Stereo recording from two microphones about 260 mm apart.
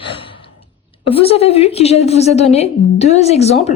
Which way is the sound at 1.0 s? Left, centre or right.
Left.